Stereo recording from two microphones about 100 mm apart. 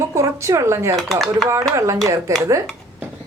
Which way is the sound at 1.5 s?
30° right (ahead or behind).